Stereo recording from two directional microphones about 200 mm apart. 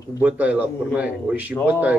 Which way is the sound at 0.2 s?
5° right (ahead or behind).